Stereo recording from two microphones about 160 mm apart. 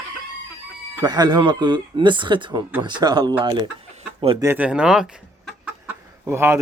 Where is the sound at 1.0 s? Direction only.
25° right (ahead or behind).